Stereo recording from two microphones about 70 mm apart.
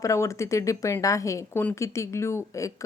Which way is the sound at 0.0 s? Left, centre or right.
Left.